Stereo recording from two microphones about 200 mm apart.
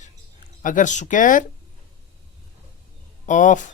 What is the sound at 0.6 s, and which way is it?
Speech, 40° left (ahead or behind).